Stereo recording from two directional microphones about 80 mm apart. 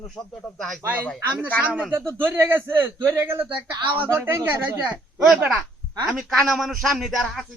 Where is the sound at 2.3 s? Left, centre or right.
Right.